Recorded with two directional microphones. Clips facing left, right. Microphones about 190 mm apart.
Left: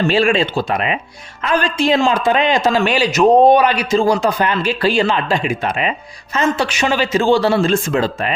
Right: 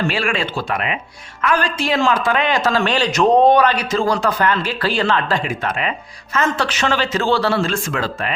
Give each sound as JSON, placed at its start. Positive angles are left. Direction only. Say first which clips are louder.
{"t": 0.1, "sound": "a man's voice", "louder": "left 7 dB", "side_deg": 25}